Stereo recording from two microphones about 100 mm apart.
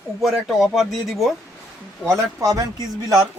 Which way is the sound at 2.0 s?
35° right (ahead or behind).